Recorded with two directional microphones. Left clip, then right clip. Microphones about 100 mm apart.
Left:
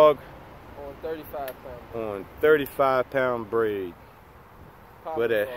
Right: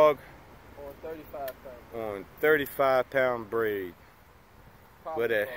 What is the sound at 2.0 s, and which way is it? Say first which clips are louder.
Speech: left 4 dB; centre (ahead or behind).